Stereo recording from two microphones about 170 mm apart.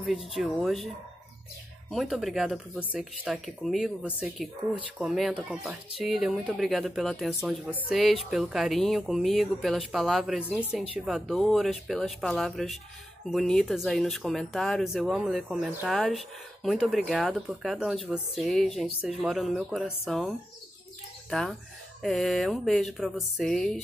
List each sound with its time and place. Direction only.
0.0 s speech: centre (ahead or behind)
1.9 s speech: centre (ahead or behind)